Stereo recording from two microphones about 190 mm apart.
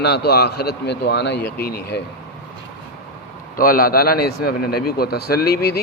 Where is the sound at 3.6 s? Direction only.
50° left (ahead or behind).